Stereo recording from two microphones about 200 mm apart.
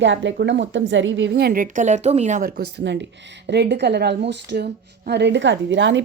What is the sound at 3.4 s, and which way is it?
A woman's voice, 55° right (ahead or behind).